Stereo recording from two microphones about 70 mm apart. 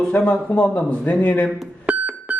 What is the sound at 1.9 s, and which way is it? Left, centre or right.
Music, right.